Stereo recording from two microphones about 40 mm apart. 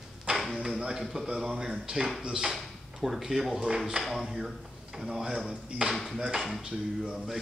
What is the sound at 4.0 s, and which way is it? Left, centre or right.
Speech, centre.